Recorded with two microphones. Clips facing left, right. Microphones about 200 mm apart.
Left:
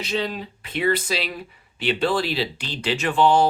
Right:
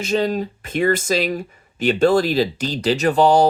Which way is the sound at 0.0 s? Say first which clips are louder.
Right 7 dB; 45° right (ahead or behind).